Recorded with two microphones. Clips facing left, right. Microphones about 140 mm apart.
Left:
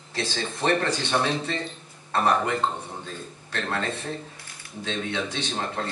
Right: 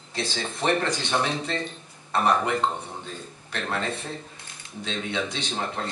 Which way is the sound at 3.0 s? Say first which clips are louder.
Left 1 dB; 15° right (ahead or behind).